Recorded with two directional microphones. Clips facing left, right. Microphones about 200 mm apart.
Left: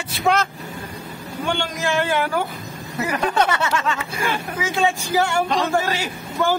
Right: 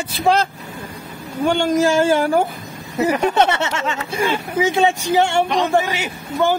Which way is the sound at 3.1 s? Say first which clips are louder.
Even; 25° right (ahead or behind).